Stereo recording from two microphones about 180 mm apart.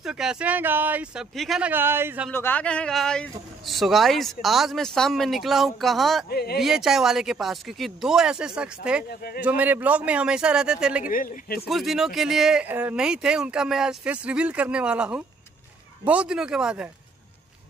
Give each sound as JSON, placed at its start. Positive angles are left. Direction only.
{"t": 0.0, "sound": "a man's voice", "side_deg": -5}
{"t": 2.3, "sound": "speech", "side_deg": 10}
{"t": 6.3, "sound": "speech", "side_deg": 60}
{"t": 6.6, "sound": "a man's voice", "side_deg": 0}
{"t": 11.1, "sound": "speech", "side_deg": 50}
{"t": 11.6, "sound": "speech", "side_deg": 0}